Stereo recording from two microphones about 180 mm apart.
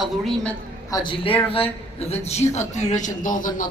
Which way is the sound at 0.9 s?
25° left (ahead or behind).